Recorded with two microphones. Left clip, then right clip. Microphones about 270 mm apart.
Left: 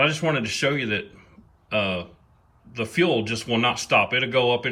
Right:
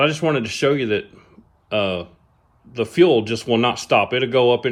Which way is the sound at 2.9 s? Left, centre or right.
Centre.